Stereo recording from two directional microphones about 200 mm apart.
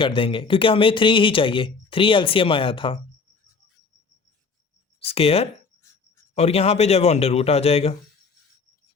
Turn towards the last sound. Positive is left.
turn(degrees=30)  # may be behind; listen again after turning